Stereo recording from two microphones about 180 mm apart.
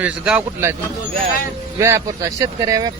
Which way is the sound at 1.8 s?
15° right (ahead or behind).